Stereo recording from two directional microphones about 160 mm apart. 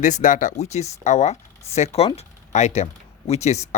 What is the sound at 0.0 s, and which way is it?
Speech, 50° left (ahead or behind).